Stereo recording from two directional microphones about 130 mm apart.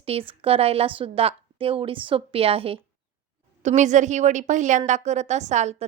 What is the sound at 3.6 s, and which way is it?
A woman's voice, 65° right (ahead or behind).